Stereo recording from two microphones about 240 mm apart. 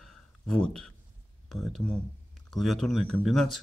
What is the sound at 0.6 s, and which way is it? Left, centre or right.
Speech, centre.